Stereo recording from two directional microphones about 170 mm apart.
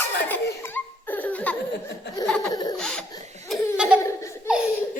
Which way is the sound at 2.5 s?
25° left (ahead or behind).